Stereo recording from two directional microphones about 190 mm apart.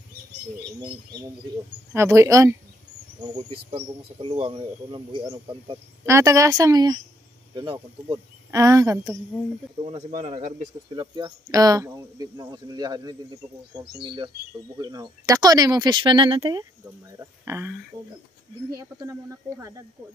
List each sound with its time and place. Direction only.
2.0 s speech: 15° right (ahead or behind)
9.8 s speech: 35° right (ahead or behind)
10.9 s speech: 25° right (ahead or behind)
18.8 s speech: 15° right (ahead or behind)